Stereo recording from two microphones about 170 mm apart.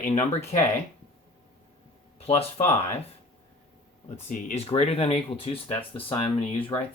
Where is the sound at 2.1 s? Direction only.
35° left (ahead or behind).